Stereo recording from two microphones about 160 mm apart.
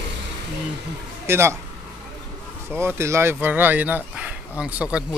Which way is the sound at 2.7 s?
15° right (ahead or behind).